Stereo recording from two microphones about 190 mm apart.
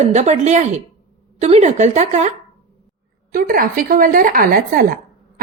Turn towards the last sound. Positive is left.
turn(degrees=-50)  # may be behind; listen again after turning